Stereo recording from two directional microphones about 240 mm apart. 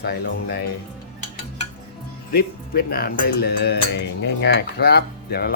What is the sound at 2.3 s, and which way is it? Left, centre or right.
Cutlery, left.